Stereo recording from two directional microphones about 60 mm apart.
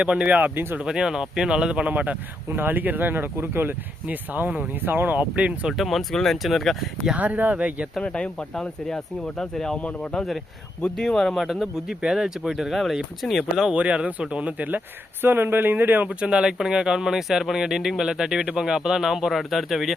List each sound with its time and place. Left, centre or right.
0.0 s speech: centre
0.9 s speech: centre
1.9 s speech: right
5.3 s speech: centre
5.7 s speech: centre
7.2 s speech: right
8.0 s speech: centre
10.9 s speech: centre
12.7 s speech: centre
13.7 s speech: centre
15.2 s speech: right
16.0 s speech: centre